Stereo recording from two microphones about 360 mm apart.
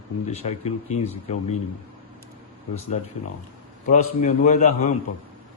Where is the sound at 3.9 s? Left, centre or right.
Left.